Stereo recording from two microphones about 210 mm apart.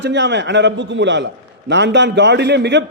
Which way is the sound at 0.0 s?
55° right (ahead or behind).